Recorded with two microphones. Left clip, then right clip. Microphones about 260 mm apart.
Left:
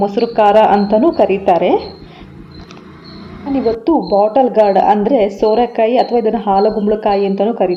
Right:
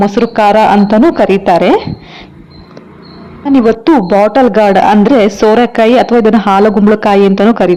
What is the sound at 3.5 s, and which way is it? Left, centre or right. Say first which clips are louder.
A woman's voice: right 6 dB; right.